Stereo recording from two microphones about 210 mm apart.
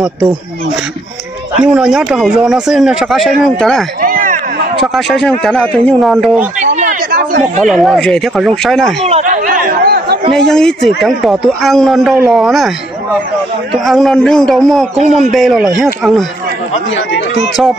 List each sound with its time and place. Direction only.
1.6 s speech: 5° right (ahead or behind)
4.0 s a sound: 40° right (ahead or behind)
4.7 s speech: centre (ahead or behind)
6.6 s a sound: 35° right (ahead or behind)
7.6 s speech: centre (ahead or behind)
9.0 s chatter: 35° right (ahead or behind)
10.3 s speech: 5° left (ahead or behind)
16.9 s speech: 60° left (ahead or behind)